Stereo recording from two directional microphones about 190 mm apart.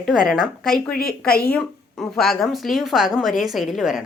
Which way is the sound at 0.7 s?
50° left (ahead or behind).